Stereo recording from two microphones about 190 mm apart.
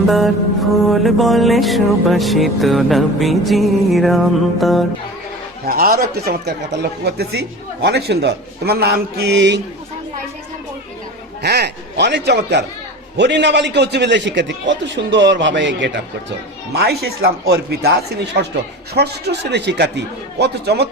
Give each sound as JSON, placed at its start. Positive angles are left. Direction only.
{"t": 0.1, "sound": "music", "side_deg": 0}
{"t": 5.6, "sound": "speech", "side_deg": -50}
{"t": 11.4, "sound": "a man's voice", "side_deg": -60}
{"t": 16.7, "sound": "speech", "side_deg": -60}
{"t": 18.9, "sound": "speech", "side_deg": -60}